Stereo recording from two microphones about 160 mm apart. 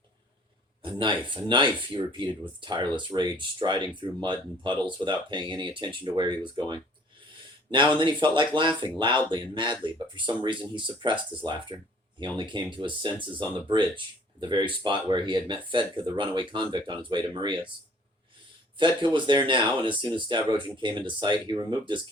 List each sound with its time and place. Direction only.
0.8 s speech: 30° right (ahead or behind)
18.8 s speech: 30° right (ahead or behind)